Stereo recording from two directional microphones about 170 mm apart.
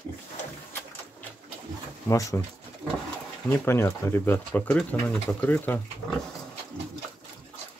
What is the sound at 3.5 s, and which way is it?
Speech, 15° left (ahead or behind).